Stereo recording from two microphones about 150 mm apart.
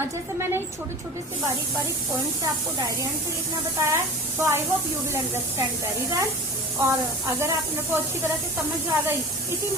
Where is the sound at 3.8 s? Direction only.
20° right (ahead or behind).